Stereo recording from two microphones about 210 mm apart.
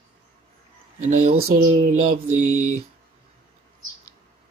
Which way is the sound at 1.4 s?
45° right (ahead or behind).